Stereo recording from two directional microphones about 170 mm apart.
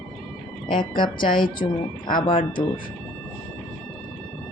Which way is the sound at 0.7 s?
30° left (ahead or behind).